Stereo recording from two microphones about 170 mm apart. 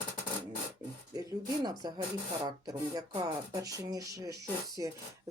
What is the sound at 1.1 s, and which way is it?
Speech, 20° right (ahead or behind).